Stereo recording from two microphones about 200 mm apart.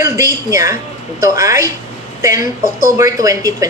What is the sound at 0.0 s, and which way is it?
A woman's voice, 15° right (ahead or behind).